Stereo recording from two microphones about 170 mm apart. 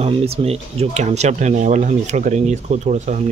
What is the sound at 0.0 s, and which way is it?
Speech, 35° right (ahead or behind).